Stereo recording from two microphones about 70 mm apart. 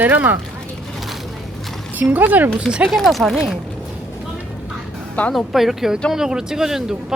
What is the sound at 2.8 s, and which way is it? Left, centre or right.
Speech, centre.